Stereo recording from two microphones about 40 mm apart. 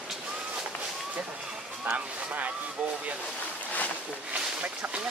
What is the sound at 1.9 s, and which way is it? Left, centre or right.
Speech, right.